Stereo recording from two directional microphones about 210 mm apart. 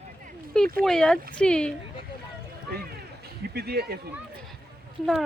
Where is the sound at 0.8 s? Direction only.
5° left (ahead or behind).